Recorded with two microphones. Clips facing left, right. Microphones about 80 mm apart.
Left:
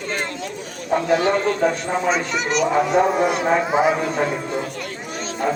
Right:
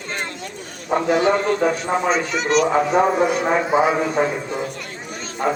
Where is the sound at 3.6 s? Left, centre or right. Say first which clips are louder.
Right 3 dB; left.